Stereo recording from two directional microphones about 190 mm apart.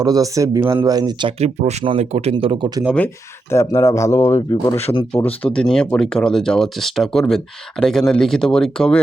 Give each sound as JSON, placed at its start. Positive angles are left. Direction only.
{"t": 0.0, "sound": "speech", "side_deg": -20}
{"t": 1.4, "sound": "speech", "side_deg": -35}
{"t": 3.5, "sound": "speech", "side_deg": 15}
{"t": 4.8, "sound": "speech", "side_deg": 30}
{"t": 5.1, "sound": "speech", "side_deg": 10}